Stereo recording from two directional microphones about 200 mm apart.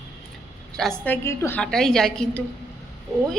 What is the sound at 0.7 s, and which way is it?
A woman's voice, 5° left (ahead or behind).